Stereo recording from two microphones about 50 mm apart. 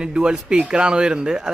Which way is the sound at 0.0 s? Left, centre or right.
Centre.